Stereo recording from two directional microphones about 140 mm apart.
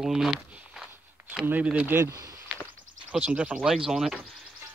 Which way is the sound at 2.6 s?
10° right (ahead or behind).